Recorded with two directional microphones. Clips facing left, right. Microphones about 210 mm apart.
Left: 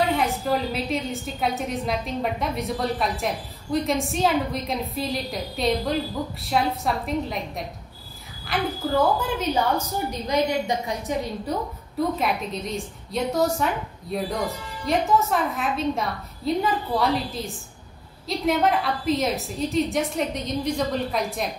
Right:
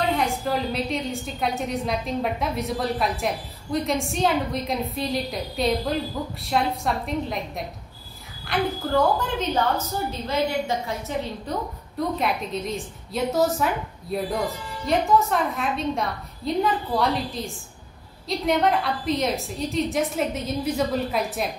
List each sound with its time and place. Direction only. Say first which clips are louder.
0.2 s a woman's voice: left 1 dB; centre (ahead or behind)
10.2 s a woman's voice: left 2 dB; 15° left (ahead or behind)
12.2 s a woman's voice: even; centre (ahead or behind)